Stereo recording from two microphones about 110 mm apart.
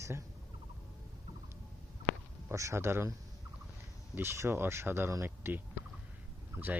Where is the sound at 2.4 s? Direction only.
25° right (ahead or behind).